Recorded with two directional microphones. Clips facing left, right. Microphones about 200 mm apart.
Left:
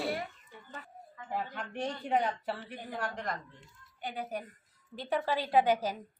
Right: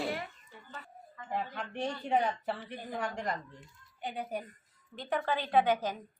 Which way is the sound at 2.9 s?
5° left (ahead or behind).